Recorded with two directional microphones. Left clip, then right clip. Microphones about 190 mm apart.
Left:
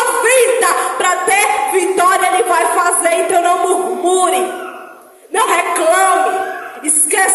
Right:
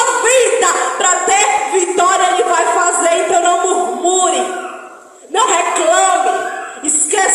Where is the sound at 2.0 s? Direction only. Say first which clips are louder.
Even; 45° left (ahead or behind).